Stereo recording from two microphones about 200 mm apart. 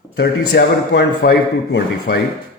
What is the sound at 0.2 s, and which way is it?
A man's voice, 55° left (ahead or behind).